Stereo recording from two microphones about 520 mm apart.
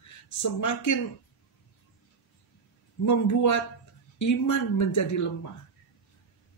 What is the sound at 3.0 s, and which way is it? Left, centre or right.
Speech, left.